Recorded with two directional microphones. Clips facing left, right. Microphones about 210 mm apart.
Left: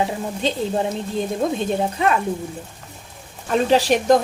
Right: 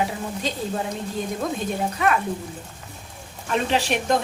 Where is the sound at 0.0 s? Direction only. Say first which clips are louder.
Left 4 dB; 25° left (ahead or behind).